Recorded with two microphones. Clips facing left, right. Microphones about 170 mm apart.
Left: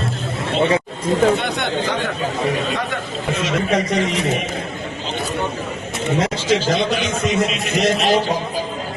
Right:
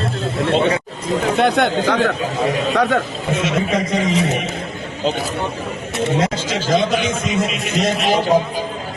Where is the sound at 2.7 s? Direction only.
80° right.